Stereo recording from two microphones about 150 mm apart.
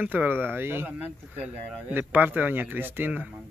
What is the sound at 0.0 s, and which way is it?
Speech, 10° right (ahead or behind).